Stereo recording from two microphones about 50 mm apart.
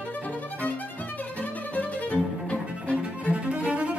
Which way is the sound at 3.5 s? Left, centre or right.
Right.